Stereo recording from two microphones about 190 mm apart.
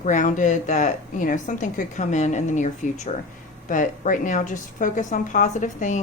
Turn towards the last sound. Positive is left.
turn(degrees=40)  # may be behind; listen again after turning